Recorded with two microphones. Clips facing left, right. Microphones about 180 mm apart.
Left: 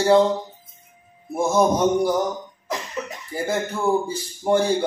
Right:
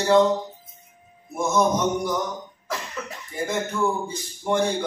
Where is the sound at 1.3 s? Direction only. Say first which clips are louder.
Left 3 dB; 30° left (ahead or behind).